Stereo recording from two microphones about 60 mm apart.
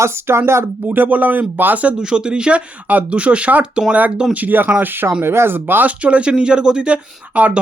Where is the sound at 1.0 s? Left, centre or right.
Right.